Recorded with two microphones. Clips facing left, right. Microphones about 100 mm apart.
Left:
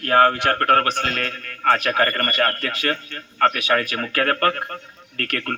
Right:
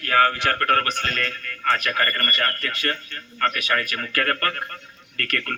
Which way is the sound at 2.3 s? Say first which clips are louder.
Left 4 dB; 65° left (ahead or behind).